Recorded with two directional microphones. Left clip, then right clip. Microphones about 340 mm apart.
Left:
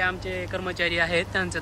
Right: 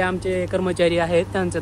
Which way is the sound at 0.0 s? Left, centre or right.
Centre.